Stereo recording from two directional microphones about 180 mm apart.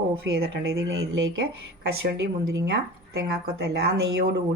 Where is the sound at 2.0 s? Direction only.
70° right (ahead or behind).